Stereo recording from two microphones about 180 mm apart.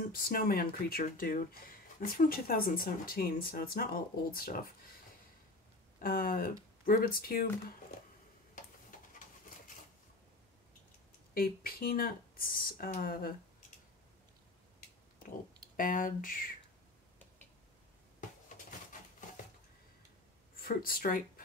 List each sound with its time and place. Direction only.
0.1 s speech: 55° left (ahead or behind)
5.9 s speech: 50° left (ahead or behind)
11.3 s speech: 55° left (ahead or behind)
15.7 s speech: 50° left (ahead or behind)
20.5 s speech: 55° left (ahead or behind)